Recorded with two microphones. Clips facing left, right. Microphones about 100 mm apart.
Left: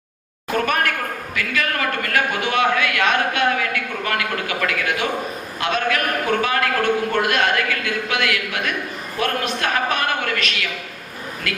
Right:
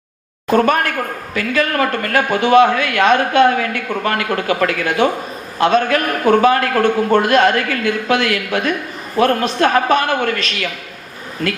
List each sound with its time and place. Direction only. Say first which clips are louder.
0.5 s a man's voice: right 6 dB; 35° right (ahead or behind)